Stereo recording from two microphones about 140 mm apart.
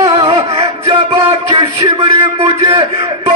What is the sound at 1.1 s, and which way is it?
Speech, 40° right (ahead or behind).